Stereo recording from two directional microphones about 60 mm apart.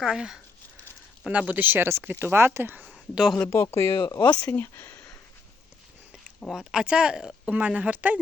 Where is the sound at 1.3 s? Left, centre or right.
Right.